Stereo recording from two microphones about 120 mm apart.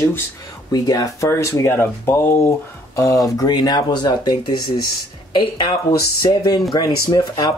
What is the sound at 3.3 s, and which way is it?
Speech, 35° left (ahead or behind).